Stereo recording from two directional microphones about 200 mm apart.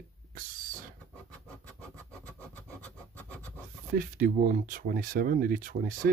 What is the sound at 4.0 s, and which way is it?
Speech, 45° right (ahead or behind).